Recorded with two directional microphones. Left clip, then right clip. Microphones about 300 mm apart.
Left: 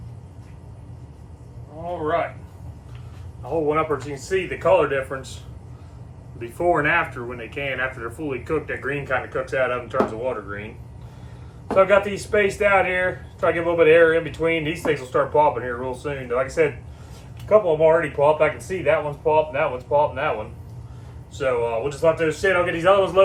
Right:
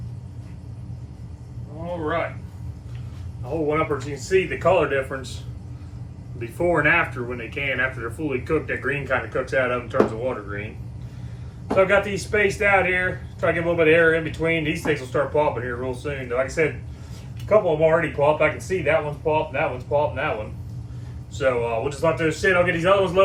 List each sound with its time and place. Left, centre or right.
3.7 s speech: centre
6.4 s speech: centre
11.7 s speech: centre
21.3 s speech: centre